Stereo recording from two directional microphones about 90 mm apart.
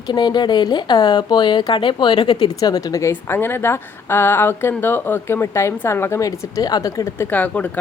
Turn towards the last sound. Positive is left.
turn(degrees=15)  # may be behind; listen again after turning